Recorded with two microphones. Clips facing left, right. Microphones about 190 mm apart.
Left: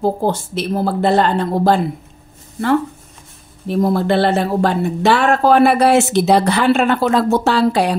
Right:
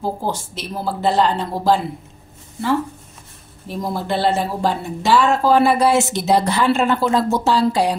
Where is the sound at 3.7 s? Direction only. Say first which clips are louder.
Left 8 dB; 60° left (ahead or behind).